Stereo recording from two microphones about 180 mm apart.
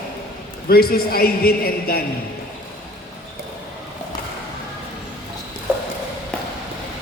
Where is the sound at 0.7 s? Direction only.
55° left (ahead or behind).